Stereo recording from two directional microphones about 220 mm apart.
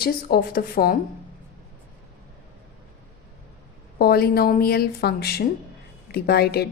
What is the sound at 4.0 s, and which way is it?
Speech, 45° left (ahead or behind).